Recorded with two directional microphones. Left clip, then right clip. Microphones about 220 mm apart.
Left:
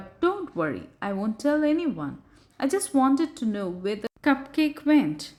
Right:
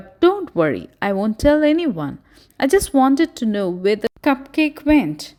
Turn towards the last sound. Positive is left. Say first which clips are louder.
# right 6 dB
turn(degrees=-30)  # may be behind; listen again after turning